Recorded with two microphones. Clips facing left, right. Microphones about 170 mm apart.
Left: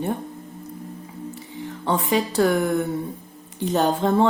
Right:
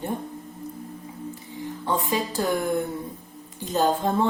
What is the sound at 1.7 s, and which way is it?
A woman's voice, 70° left (ahead or behind).